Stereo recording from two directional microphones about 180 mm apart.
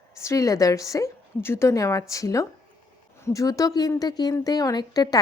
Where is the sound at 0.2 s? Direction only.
15° left (ahead or behind).